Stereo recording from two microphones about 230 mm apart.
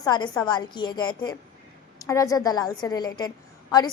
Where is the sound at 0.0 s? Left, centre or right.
Centre.